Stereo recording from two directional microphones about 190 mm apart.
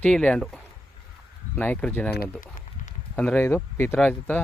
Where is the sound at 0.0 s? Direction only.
5° left (ahead or behind).